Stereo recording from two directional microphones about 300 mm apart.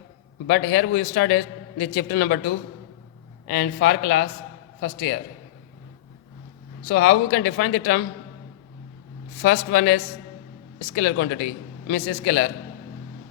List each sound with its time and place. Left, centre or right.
0.4 s speech: left
3.4 s speech: left
6.8 s speech: left
9.4 s speech: left